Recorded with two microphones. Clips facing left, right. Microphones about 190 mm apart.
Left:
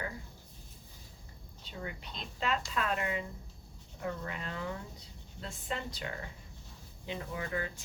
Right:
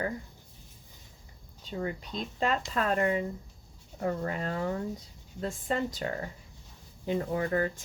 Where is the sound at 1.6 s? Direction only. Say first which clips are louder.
Right 9 dB; 40° right (ahead or behind).